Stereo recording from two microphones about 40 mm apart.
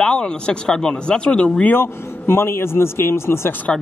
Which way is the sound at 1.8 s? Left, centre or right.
Left.